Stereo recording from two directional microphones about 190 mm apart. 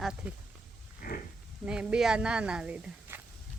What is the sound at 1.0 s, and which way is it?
Pig, 50° left (ahead or behind).